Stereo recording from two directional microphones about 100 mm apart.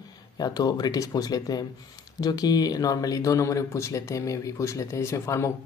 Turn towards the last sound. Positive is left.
turn(degrees=30)  # may be behind; listen again after turning